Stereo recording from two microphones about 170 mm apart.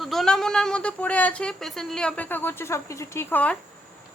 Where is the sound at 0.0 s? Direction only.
Centre (ahead or behind).